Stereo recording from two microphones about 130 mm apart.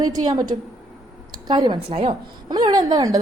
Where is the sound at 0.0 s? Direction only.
30° right (ahead or behind); by 2.1 s 45° right (ahead or behind).